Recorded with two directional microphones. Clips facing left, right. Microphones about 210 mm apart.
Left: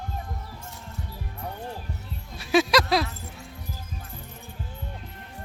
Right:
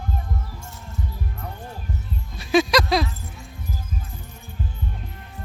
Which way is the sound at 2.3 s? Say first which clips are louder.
Right 2 dB; 5° left (ahead or behind).